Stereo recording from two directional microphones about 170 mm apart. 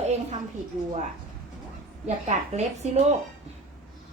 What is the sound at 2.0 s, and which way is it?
Speech, 40° right (ahead or behind).